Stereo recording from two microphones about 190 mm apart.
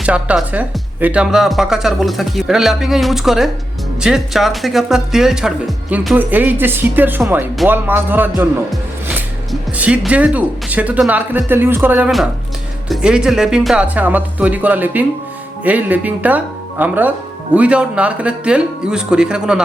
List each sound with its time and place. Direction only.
0.0 s speech: 5° right (ahead or behind)
9.5 s speech: 5° right (ahead or behind)